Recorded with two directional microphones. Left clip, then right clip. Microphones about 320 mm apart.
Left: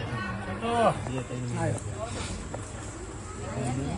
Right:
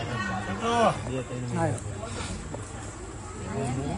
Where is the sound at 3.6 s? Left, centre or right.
Centre.